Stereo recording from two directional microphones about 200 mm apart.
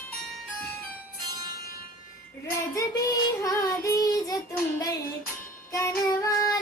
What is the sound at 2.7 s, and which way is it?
Child singing, 15° left (ahead or behind).